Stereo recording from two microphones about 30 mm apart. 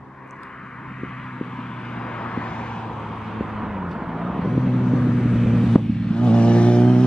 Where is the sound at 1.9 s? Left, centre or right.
Left.